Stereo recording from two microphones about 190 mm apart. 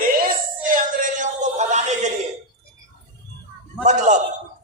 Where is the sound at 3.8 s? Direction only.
40° right (ahead or behind).